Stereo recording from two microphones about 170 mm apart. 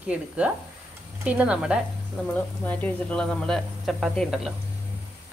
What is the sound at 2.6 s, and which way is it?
Speech, 10° left (ahead or behind).